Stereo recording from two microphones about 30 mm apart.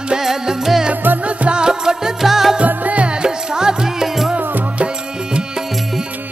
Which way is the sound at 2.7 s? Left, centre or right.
Right.